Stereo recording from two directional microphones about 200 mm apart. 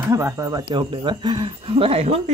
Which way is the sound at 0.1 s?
15° right (ahead or behind).